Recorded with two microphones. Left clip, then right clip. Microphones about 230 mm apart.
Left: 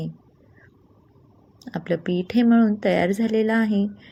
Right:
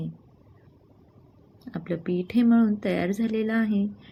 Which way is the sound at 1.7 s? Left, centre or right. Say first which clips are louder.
Left 5 dB; centre.